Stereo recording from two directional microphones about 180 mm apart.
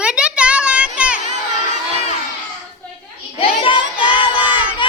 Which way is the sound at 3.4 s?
30° left (ahead or behind).